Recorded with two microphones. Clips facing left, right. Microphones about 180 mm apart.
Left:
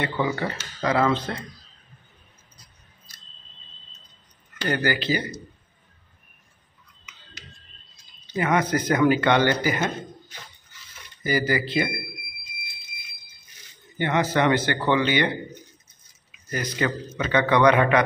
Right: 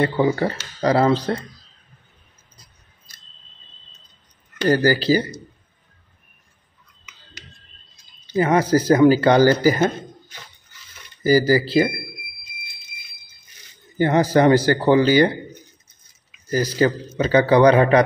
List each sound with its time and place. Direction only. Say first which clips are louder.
0.0 s a man's voice: right 7 dB; 35° right (ahead or behind)
4.6 s a man's voice: right 8 dB; 35° right (ahead or behind)
8.4 s a man's voice: right 6 dB; 30° right (ahead or behind)
11.2 s a man's voice: right 8 dB; 35° right (ahead or behind)
13.9 s a man's voice: right 6 dB; 35° right (ahead or behind)
16.4 s a man's voice: right 8 dB; 35° right (ahead or behind)